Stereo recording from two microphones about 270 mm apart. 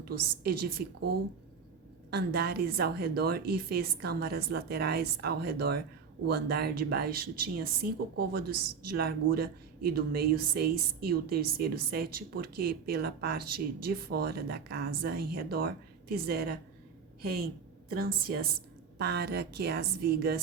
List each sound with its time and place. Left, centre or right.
0.1 s speech: right
2.0 s a woman's voice: right